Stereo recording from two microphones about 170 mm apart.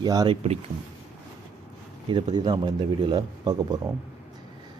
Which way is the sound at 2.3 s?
25° right (ahead or behind).